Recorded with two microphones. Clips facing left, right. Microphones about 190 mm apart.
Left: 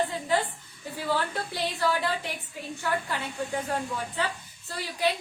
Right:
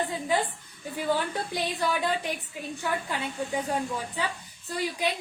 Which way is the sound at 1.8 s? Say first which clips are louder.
Left 1 dB; 15° right (ahead or behind).